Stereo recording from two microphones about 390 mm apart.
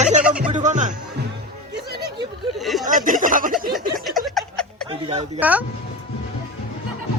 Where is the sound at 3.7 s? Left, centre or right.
Centre.